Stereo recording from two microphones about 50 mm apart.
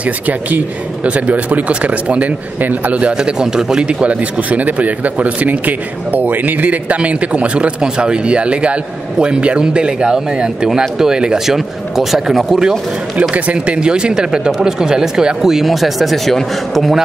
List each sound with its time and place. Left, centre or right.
0.0 s a man's voice: right
3.2 s a man's voice: centre
13.3 s speech: right; by 17.0 s centre